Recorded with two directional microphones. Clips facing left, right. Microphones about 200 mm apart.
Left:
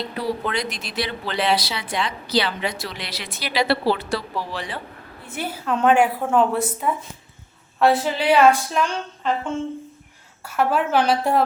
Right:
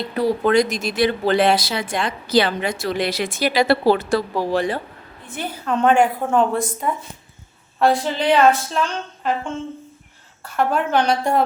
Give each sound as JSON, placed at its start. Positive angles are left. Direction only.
{"t": 0.2, "sound": "speech", "side_deg": -45}
{"t": 5.2, "sound": "a woman's voice", "side_deg": 10}
{"t": 10.4, "sound": "a woman's voice", "side_deg": 5}